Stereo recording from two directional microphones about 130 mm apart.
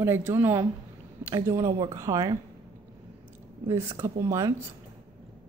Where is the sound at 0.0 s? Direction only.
20° right (ahead or behind).